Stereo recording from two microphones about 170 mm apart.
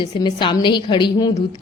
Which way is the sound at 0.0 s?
25° left (ahead or behind).